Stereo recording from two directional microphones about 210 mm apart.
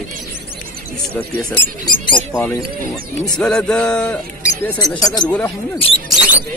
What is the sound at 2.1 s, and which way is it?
Speech, 5° left (ahead or behind).